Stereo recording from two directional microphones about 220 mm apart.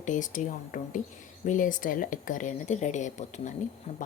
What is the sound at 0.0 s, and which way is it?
Speech, 35° left (ahead or behind).